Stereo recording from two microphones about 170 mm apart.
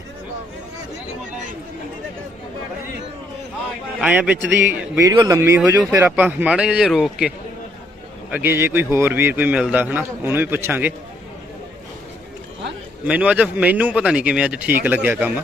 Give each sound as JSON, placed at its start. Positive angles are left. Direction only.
{"t": 4.0, "sound": "a man's voice", "side_deg": -10}
{"t": 4.9, "sound": "a man's voice", "side_deg": -20}
{"t": 13.1, "sound": "a man's voice", "side_deg": -5}